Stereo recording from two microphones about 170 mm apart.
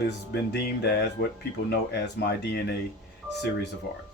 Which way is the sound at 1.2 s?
90° left.